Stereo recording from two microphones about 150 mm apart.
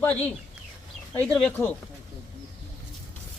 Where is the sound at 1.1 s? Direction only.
10° left (ahead or behind).